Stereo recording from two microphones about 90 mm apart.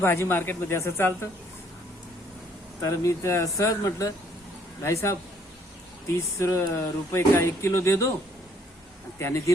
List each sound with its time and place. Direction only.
0.0 s speech: 25° left (ahead or behind)
2.8 s speech: 35° left (ahead or behind)
9.1 s speech: 30° left (ahead or behind)